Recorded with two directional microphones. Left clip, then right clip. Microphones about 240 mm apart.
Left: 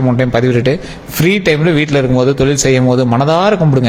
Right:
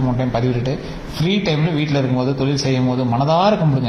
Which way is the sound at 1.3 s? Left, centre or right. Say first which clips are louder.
Left 8 dB; left.